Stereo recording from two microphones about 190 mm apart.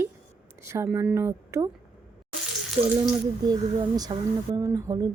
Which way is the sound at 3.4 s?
20° right (ahead or behind).